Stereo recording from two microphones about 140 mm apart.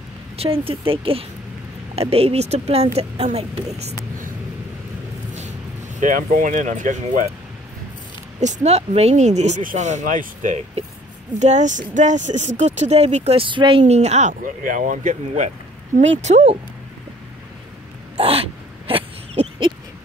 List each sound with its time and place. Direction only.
0.4 s speech: 40° right (ahead or behind)
5.9 s speech: 70° right (ahead or behind)
8.4 s speech: 55° right (ahead or behind)
14.4 s speech: 75° right (ahead or behind); by 16.5 s 55° right (ahead or behind)
18.1 s a sound: 45° right (ahead or behind)